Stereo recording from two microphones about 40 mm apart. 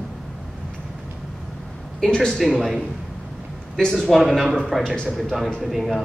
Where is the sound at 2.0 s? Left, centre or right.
Centre.